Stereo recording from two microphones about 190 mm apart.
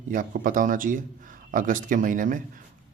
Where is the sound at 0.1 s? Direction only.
45° right (ahead or behind).